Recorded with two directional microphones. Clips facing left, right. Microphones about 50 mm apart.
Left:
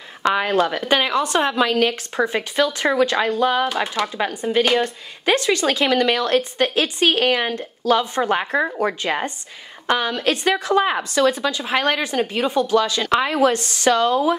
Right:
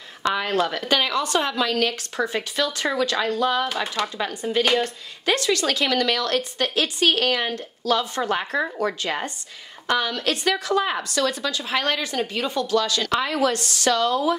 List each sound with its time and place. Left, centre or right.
0.5 s speech: centre
3.7 s speech: centre
4.2 s a woman's voice: left